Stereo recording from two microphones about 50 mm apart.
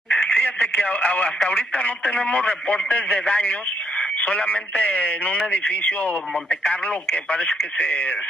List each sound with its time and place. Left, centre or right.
0.1 s radio: left
1.4 s speech: left